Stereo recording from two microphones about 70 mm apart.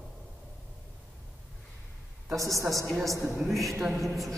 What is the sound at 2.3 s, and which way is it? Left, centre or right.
Speech, right.